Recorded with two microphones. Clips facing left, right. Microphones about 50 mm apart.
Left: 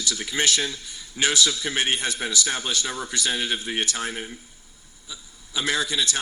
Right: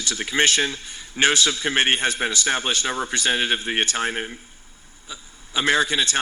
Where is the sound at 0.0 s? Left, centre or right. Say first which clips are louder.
Right 4 dB; right.